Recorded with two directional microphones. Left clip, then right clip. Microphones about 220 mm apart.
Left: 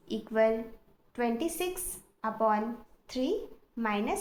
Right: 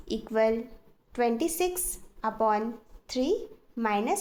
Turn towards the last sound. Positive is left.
turn(degrees=-50)  # may be behind; listen again after turning